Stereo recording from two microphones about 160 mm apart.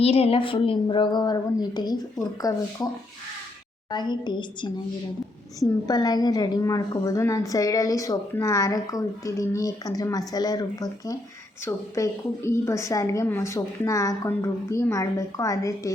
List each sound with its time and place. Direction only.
0.0 s a woman's voice: 40° left (ahead or behind); by 15.9 s 20° left (ahead or behind)